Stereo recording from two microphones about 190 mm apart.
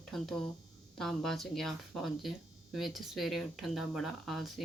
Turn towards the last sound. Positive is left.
turn(degrees=0)  # may be behind; listen again after turning